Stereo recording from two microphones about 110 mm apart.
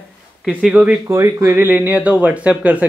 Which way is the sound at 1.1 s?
25° right (ahead or behind).